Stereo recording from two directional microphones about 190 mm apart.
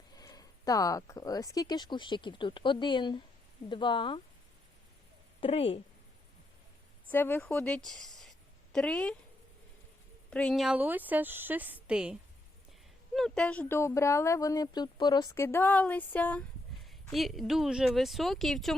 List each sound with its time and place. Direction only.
0.1 s speech: 20° left (ahead or behind)
5.4 s speech: 30° left (ahead or behind)
7.1 s a woman's voice: 10° left (ahead or behind)
10.2 s a woman's voice: 5° left (ahead or behind)
13.1 s speech: 5° left (ahead or behind)